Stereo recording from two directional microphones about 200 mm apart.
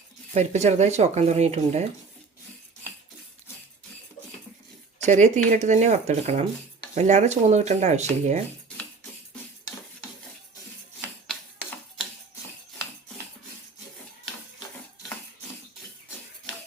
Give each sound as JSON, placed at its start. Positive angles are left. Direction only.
{"t": 0.3, "sound": "speech", "side_deg": -35}
{"t": 5.0, "sound": "speech", "side_deg": -35}